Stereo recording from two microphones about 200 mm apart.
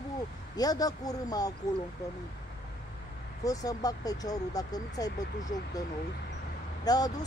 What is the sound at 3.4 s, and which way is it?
Speech, 15° left (ahead or behind).